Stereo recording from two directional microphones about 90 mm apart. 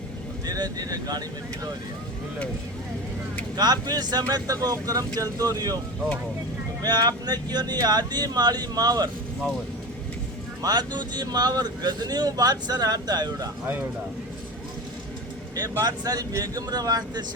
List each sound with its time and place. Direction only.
0.4 s speech: 45° right (ahead or behind)
3.6 s speech: 50° right (ahead or behind)
6.8 s speech: 50° right (ahead or behind)
10.6 s speech: 50° right (ahead or behind)
15.8 s speech: 45° right (ahead or behind)